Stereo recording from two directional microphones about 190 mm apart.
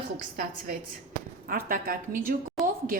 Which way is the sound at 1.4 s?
50° right (ahead or behind).